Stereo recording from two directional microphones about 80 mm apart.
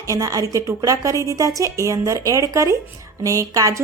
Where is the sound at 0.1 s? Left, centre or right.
Right.